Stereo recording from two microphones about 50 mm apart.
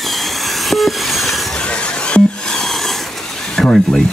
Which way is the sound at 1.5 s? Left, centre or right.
Centre.